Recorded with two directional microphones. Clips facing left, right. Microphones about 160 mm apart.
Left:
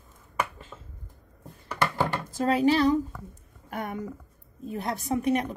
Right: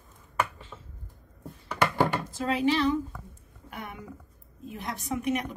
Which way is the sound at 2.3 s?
40° left (ahead or behind).